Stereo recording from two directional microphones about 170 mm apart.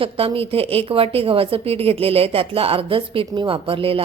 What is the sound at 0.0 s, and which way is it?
Speech, 35° right (ahead or behind).